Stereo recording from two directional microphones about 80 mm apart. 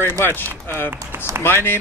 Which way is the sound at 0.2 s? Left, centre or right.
Left.